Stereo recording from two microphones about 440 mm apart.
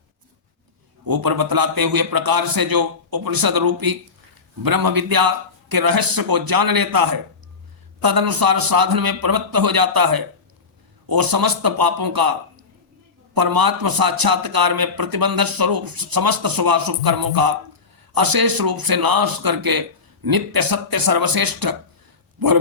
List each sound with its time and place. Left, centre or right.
1.0 s a man's voice: right